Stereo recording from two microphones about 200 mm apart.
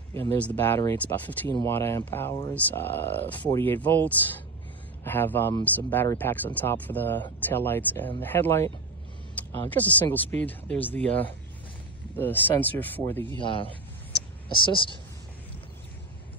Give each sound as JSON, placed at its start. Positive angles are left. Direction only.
{"t": 0.1, "sound": "speech", "side_deg": 10}
{"t": 13.4, "sound": "a woman's voice", "side_deg": 25}